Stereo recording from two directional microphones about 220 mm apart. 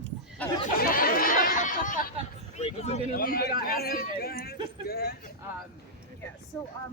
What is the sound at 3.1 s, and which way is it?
A man's voice, 40° left (ahead or behind).